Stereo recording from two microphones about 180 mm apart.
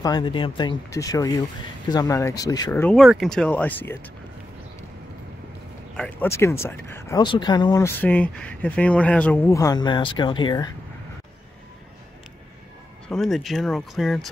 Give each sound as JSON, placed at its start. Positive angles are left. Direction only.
{"t": 0.0, "sound": "speech", "side_deg": 25}
{"t": 3.0, "sound": "speech", "side_deg": 0}
{"t": 5.9, "sound": "speech", "side_deg": 10}
{"t": 8.0, "sound": "speech", "side_deg": 10}
{"t": 13.1, "sound": "speech", "side_deg": 0}